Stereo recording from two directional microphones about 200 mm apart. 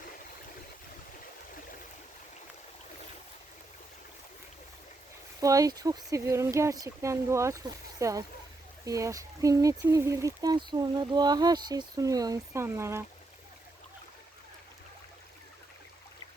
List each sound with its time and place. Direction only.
5.4 s speech: 15° right (ahead or behind)